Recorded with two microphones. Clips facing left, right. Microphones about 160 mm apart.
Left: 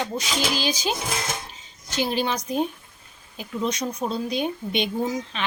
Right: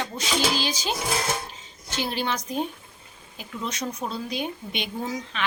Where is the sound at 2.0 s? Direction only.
15° left (ahead or behind).